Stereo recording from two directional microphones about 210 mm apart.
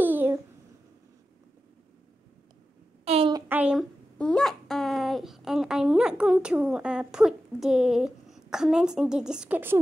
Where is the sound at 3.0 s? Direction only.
25° right (ahead or behind).